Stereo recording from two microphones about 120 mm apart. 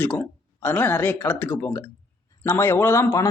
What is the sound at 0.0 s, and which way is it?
Speech, 15° left (ahead or behind).